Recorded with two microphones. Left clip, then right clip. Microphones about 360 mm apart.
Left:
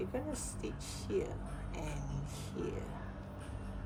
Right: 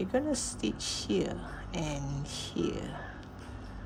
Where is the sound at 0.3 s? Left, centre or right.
Right.